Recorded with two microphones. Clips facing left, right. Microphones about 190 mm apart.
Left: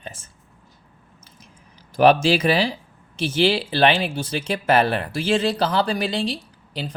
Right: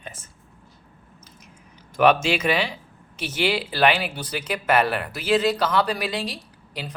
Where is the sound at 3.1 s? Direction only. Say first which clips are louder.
Left 5 dB; 30° left (ahead or behind).